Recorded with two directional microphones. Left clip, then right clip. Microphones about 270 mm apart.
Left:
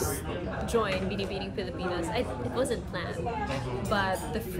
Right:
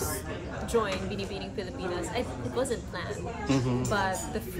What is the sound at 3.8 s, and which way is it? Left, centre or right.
Speech, centre.